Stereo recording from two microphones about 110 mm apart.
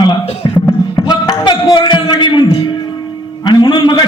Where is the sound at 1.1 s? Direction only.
40° left (ahead or behind).